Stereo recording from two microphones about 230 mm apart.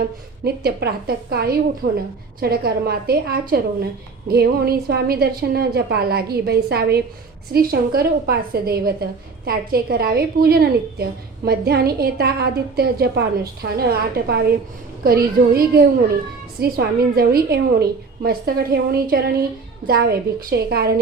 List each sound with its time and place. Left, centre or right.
0.0 s a woman's voice: right